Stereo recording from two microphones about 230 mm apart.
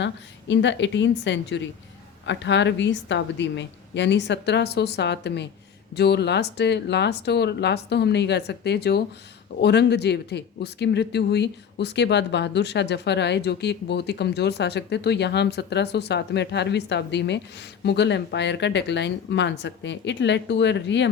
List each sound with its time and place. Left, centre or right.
0.0 s speech: left